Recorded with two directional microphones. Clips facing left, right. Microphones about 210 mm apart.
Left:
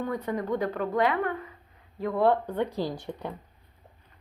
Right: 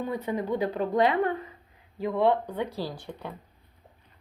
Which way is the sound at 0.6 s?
25° right (ahead or behind).